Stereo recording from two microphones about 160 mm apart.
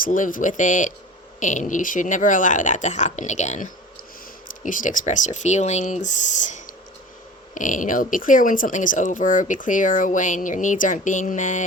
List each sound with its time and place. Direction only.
0.0 s speech: 60° left (ahead or behind)